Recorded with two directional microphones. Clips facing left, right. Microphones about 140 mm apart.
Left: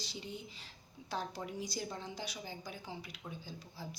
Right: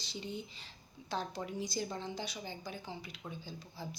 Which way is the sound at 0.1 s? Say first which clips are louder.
Right 3 dB; 5° left (ahead or behind).